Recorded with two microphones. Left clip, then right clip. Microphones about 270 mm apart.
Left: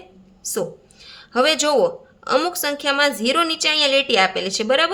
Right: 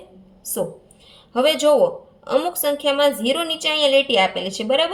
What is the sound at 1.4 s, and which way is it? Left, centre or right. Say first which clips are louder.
A woman's voice: right 1 dB; left.